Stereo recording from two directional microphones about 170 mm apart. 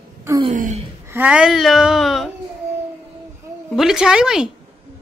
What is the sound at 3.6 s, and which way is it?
Speech, centre (ahead or behind).